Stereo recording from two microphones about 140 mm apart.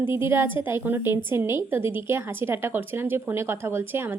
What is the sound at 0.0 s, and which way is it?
A woman's voice, 15° right (ahead or behind).